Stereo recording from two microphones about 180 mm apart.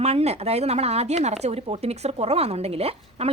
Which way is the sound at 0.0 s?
35° right (ahead or behind).